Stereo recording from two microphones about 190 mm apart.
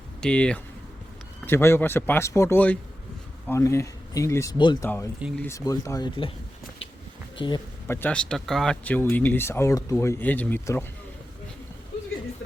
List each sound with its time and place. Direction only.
0.2 s speech: 5° left (ahead or behind); by 6.3 s 25° left (ahead or behind)
7.3 s speech: 25° left (ahead or behind)
7.9 s speech: 10° left (ahead or behind)